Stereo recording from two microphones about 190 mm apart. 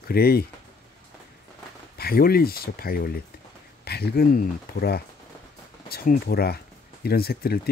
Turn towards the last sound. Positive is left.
turn(degrees=55)  # may be behind; listen again after turning